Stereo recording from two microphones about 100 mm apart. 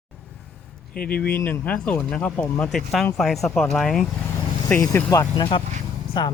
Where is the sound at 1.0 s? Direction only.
15° left (ahead or behind).